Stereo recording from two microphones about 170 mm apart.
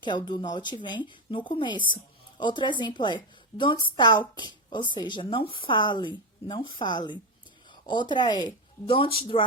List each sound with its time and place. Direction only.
0.0 s a woman's voice: 25° left (ahead or behind)